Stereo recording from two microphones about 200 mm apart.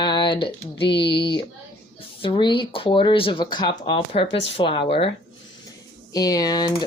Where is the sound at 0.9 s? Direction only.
55° left (ahead or behind).